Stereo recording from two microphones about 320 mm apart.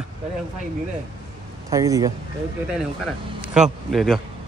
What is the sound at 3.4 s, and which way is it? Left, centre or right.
Speech, centre.